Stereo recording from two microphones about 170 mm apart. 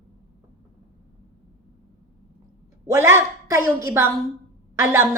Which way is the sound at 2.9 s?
15° right (ahead or behind).